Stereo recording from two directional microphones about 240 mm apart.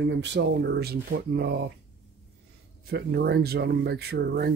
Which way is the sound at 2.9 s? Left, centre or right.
Right.